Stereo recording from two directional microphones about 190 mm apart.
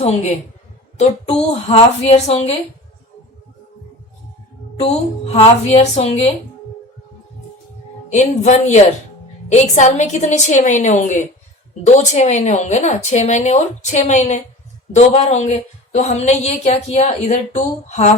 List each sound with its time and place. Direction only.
0.0 s a woman's voice: 35° left (ahead or behind)
4.8 s a woman's voice: 35° left (ahead or behind)
8.1 s a woman's voice: 35° left (ahead or behind)